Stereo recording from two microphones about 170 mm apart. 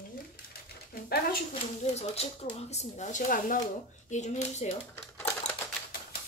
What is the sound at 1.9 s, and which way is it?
Speech, 40° left (ahead or behind).